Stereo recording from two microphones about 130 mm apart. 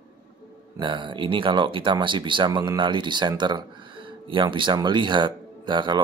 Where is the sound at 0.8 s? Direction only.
40° right (ahead or behind).